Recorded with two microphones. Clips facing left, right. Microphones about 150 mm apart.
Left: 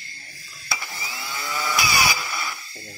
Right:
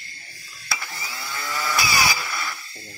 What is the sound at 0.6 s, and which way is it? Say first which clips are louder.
Vacuum cleaner: even; 20° left (ahead or behind).